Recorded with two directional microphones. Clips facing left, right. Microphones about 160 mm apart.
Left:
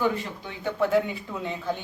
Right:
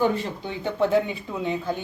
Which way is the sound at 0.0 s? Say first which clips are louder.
Right 3 dB; 30° right (ahead or behind).